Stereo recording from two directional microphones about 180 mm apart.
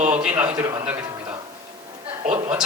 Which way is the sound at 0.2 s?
5° right (ahead or behind).